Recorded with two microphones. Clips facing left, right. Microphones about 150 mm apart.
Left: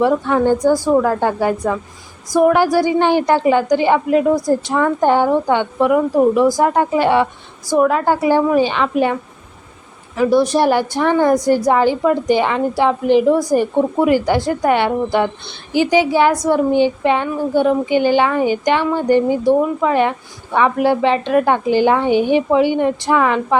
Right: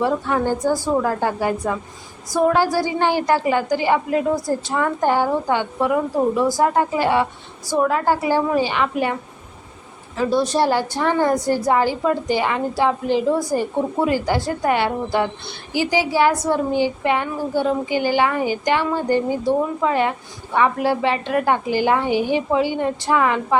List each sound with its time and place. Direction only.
0.0 s a woman's voice: 20° left (ahead or behind)
10.2 s a woman's voice: 15° left (ahead or behind)